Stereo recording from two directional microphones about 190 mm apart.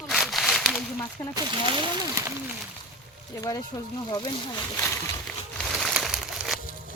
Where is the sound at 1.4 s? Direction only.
25° right (ahead or behind).